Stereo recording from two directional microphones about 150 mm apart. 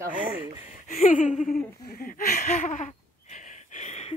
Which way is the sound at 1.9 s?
70° left (ahead or behind).